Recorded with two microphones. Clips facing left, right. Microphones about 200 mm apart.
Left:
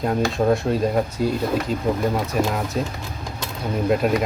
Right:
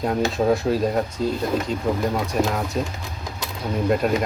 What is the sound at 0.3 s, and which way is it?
Speech, centre (ahead or behind).